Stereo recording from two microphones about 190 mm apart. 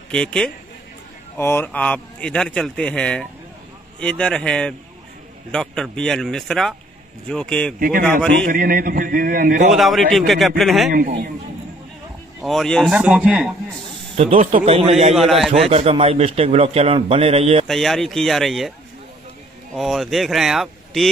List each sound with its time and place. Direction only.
0.1 s a man's voice: 5° left (ahead or behind)
8.5 s a man's voice: 45° right (ahead or behind)
9.7 s a man's voice: centre (ahead or behind)
10.9 s a man's voice: 45° right (ahead or behind)
12.4 s a man's voice: centre (ahead or behind)
14.1 s a man's voice: 35° right (ahead or behind)
15.1 s a man's voice: centre (ahead or behind)
15.6 s a man's voice: 30° right (ahead or behind)
17.6 s a man's voice: centre (ahead or behind)
19.7 s a man's voice: centre (ahead or behind)